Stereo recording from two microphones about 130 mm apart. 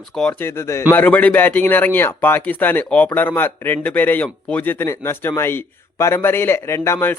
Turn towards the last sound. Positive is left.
turn(degrees=20)  # may be behind; listen again after turning